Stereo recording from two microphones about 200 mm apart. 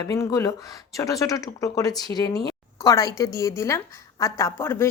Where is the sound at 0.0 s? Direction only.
20° left (ahead or behind).